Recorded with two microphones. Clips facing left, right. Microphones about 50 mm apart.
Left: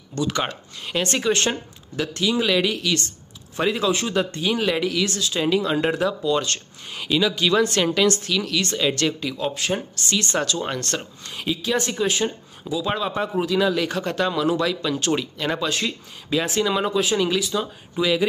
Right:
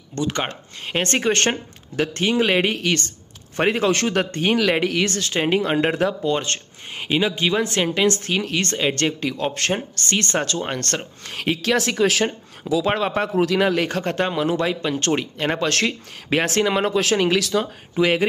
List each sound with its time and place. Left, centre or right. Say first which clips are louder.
0.1 s speech: even; right
3.9 s speech: right 2 dB; right
8.1 s speech: right 1 dB; right
9.2 s speech: right 2 dB; right
11.2 s speech: right 4 dB; right
12.8 s speech: even; right
15.0 s speech: right 2 dB; right
15.9 s speech: right 2 dB; right
17.0 s speech: right 2 dB; right
17.9 s speech: right 3 dB; right